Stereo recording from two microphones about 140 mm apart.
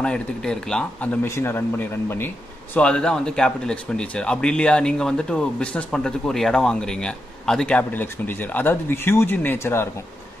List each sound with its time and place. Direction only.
0.0 s speech: 5° left (ahead or behind)
1.2 s speech: 15° left (ahead or behind)